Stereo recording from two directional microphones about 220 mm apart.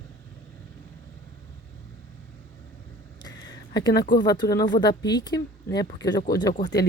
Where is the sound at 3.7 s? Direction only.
20° left (ahead or behind).